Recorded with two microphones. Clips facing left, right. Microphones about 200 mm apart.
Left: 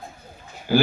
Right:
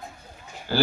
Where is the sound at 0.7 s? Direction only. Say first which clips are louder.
Left 4 dB; 15° left (ahead or behind).